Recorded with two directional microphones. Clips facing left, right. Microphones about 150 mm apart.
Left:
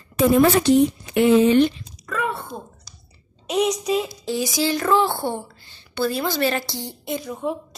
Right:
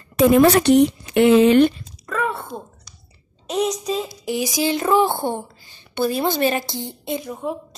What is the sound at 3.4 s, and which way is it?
Speech, 5° left (ahead or behind).